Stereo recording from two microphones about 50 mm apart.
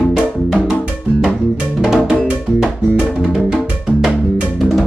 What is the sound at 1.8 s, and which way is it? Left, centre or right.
Music, centre.